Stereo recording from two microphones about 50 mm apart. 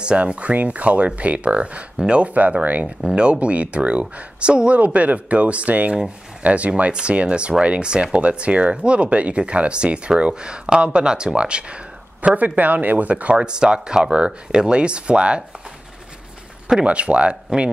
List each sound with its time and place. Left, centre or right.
0.0 s speech: right
12.4 s speech: right
13.4 s speech: centre
16.8 s speech: right